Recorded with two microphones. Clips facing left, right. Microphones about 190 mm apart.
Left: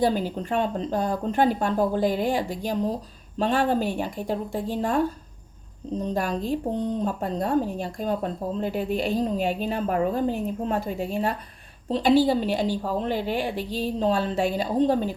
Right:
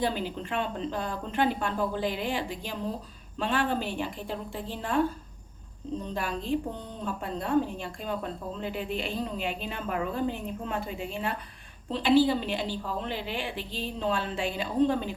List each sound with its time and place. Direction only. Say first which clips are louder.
0.0 s a woman's voice: left 6 dB; 40° left (ahead or behind)
6.1 s a woman's voice: left 2 dB; 40° left (ahead or behind)